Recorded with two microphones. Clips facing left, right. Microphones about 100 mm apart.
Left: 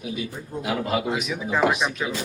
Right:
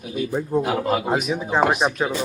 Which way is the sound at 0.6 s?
45° right (ahead or behind).